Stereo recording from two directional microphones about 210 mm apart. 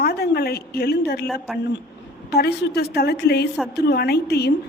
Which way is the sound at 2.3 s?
50° left (ahead or behind).